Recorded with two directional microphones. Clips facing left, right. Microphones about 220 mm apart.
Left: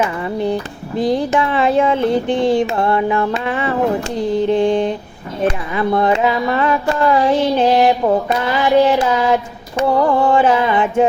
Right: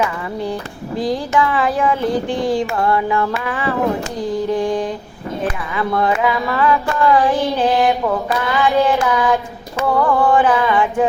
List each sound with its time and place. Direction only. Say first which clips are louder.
1.0 s music: left 2 dB; 20° left (ahead or behind)